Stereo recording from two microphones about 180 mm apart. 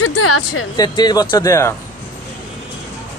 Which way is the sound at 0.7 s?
25° left (ahead or behind).